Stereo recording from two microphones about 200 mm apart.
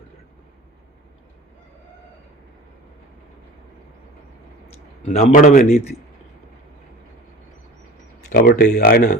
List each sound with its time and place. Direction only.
4.7 s speech: 35° left (ahead or behind)
8.3 s speech: 50° left (ahead or behind)